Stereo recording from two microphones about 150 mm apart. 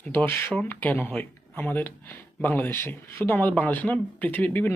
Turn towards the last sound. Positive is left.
turn(degrees=10)  # may be behind; listen again after turning